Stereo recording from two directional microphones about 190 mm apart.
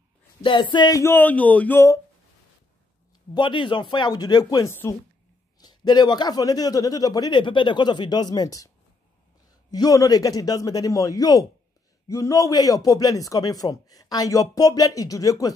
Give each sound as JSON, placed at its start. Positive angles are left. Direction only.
{"t": 0.4, "sound": "speech", "side_deg": 25}
{"t": 3.3, "sound": "a man's voice", "side_deg": 25}
{"t": 9.7, "sound": "a man's voice", "side_deg": 20}